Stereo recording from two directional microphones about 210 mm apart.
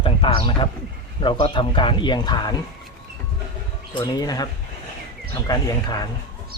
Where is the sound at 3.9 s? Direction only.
20° left (ahead or behind).